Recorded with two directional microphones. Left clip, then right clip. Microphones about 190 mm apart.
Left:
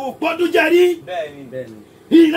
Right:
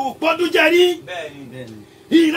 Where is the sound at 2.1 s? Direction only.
40° left (ahead or behind).